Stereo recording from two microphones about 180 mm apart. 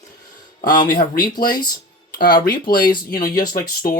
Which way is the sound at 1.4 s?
25° left (ahead or behind).